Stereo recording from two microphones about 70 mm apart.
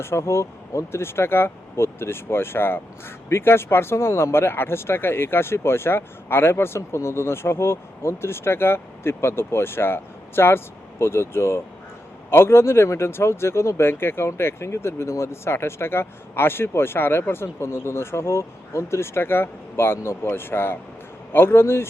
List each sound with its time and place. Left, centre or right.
0.0 s speech: left